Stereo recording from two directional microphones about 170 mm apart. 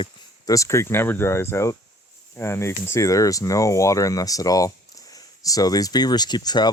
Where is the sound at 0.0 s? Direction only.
20° left (ahead or behind).